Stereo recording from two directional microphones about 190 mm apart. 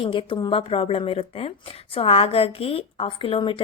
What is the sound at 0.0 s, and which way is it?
A woman's voice, 25° left (ahead or behind).